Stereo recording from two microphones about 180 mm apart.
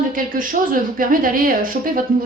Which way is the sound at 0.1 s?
50° right (ahead or behind).